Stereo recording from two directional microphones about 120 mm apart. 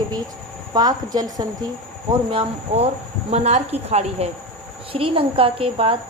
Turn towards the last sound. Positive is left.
turn(degrees=-50)  # may be behind; listen again after turning